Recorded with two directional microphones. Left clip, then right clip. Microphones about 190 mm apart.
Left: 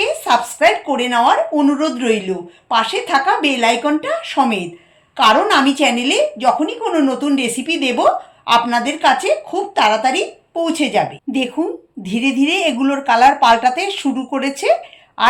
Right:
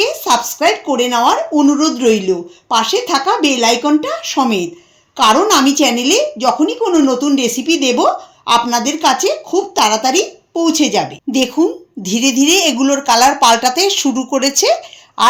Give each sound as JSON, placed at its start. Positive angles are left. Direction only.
{"t": 0.0, "sound": "a woman's voice", "side_deg": -45}